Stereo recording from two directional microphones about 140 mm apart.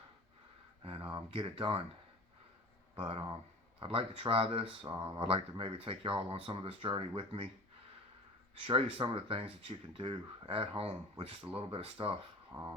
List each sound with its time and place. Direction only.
0.9 s speech: 40° right (ahead or behind)
3.0 s speech: 40° right (ahead or behind)
8.6 s speech: 35° right (ahead or behind)
12.5 s speech: 20° right (ahead or behind)